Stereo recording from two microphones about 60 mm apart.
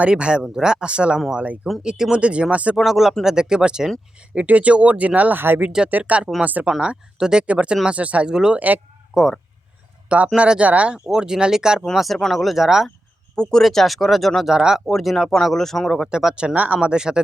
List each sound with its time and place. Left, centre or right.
0.0 s speech: centre
2.7 s speech: centre; by 5.4 s right
5.4 s speech: right
5.6 s speech: centre
6.7 s speech: centre; by 8.8 s right
9.1 s speech: centre
10.3 s speech: centre
11.9 s speech: centre
13.3 s speech: centre
13.7 s speech: centre
14.5 s speech: centre
14.8 s speech: centre
16.0 s speech: centre